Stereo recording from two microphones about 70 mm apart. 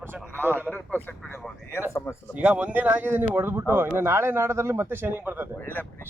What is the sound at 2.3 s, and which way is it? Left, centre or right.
Speech, centre.